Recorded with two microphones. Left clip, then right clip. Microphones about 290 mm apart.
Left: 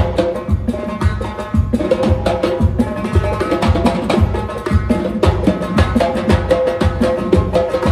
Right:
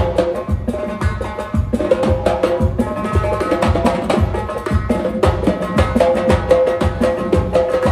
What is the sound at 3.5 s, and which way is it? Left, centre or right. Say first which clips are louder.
Music: even; centre.